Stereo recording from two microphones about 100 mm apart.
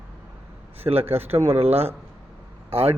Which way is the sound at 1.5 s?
90° right.